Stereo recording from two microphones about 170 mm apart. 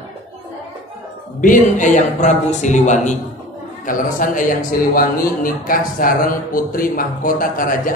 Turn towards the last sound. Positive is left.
turn(degrees=55)  # may be behind; listen again after turning